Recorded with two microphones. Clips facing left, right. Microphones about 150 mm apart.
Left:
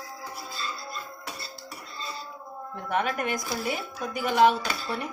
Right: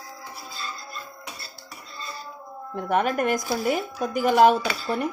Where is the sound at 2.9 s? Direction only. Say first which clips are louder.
Right 5 dB; 45° right (ahead or behind).